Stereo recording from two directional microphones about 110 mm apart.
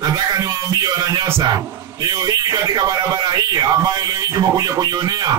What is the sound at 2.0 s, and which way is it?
A man's voice, 35° right (ahead or behind).